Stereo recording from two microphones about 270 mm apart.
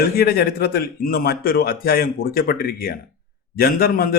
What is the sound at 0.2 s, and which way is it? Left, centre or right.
A man's voice, left.